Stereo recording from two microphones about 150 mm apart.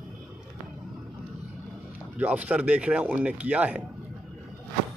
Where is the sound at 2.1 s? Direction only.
10° right (ahead or behind).